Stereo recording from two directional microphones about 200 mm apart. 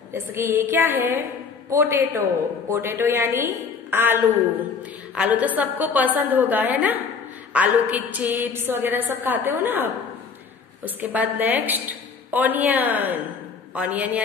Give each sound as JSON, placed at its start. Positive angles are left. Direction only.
{"t": 0.1, "sound": "a woman's voice", "side_deg": -10}